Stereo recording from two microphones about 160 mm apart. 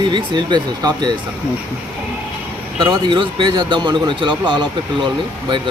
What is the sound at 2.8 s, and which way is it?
Speech, 30° right (ahead or behind).